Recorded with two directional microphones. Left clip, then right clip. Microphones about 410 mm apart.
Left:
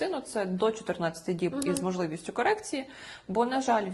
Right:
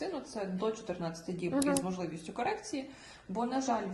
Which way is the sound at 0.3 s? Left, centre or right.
Left.